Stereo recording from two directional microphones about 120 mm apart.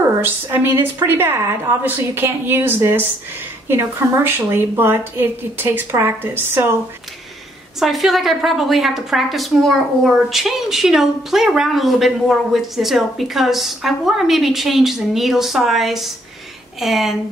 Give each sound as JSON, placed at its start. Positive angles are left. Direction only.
{"t": 0.0, "sound": "a woman's voice", "side_deg": -20}
{"t": 7.8, "sound": "a woman's voice", "side_deg": 0}